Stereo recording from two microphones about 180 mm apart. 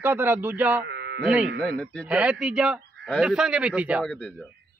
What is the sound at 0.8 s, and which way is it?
Sheep, 75° right (ahead or behind).